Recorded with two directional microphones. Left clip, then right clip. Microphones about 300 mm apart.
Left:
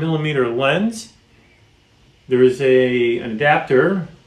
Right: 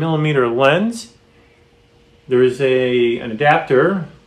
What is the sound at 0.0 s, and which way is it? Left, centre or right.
Speech, centre.